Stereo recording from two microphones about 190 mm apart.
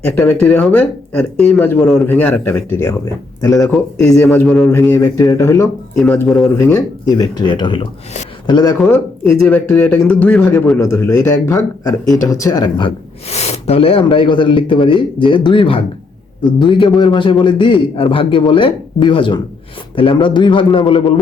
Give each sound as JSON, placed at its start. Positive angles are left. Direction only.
{"t": 0.0, "sound": "speech", "side_deg": 10}
{"t": 3.5, "sound": "a man's voice", "side_deg": 0}
{"t": 4.7, "sound": "speech", "side_deg": 20}
{"t": 6.0, "sound": "a man's voice", "side_deg": 5}
{"t": 6.6, "sound": "speech", "side_deg": 20}
{"t": 9.4, "sound": "speech", "side_deg": 10}
{"t": 13.3, "sound": "speech", "side_deg": 35}